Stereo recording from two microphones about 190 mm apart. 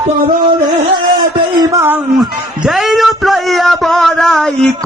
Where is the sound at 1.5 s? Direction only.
15° right (ahead or behind).